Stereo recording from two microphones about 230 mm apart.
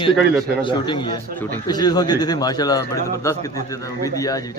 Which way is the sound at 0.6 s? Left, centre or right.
Left.